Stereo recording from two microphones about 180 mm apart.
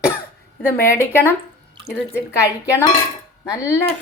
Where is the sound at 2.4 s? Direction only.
15° left (ahead or behind).